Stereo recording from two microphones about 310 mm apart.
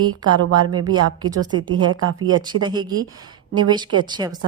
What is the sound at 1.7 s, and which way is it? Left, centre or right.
Speech, right.